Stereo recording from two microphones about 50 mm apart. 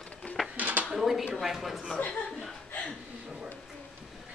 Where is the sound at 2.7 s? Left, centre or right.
Left.